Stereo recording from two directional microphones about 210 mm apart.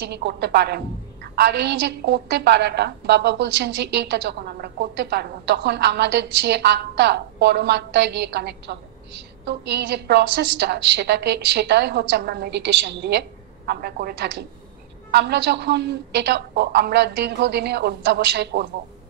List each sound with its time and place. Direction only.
0.0 s a woman's voice: 55° right (ahead or behind)